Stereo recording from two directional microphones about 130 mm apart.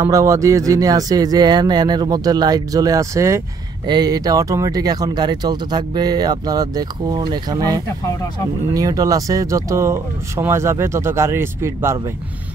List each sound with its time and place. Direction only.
0.0 s speech: 25° right (ahead or behind)
3.8 s speech: 35° right (ahead or behind)